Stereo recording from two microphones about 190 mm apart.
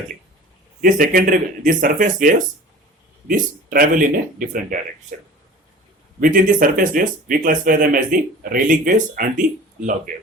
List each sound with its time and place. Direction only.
0.8 s speech: 45° right (ahead or behind)
6.1 s speech: 45° right (ahead or behind)